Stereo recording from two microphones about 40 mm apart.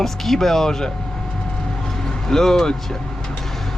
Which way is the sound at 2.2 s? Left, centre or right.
Centre.